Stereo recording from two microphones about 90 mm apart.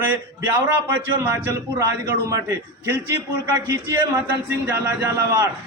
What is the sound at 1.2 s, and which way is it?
Speech, 35° right (ahead or behind).